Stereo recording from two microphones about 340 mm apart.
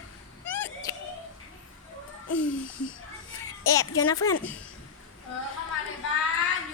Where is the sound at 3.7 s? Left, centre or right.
Centre.